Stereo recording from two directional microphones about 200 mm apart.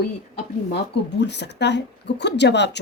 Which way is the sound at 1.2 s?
60° left (ahead or behind).